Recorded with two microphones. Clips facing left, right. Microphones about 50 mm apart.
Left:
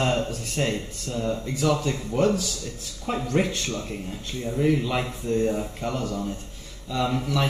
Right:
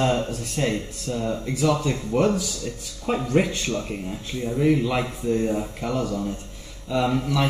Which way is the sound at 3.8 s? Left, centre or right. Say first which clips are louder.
Right 2 dB; centre.